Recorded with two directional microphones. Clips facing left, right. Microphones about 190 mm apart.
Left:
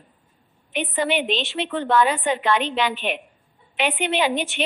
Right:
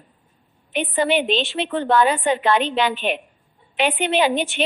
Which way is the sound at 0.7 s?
35° right (ahead or behind).